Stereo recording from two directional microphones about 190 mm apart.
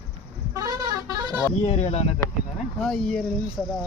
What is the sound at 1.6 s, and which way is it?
Speech, 35° left (ahead or behind).